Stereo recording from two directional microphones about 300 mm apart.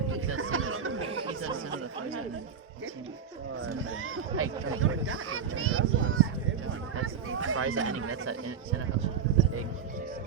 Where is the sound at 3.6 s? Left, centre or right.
Right.